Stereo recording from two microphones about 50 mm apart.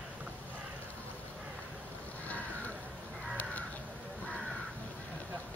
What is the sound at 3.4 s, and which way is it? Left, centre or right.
Crow, left.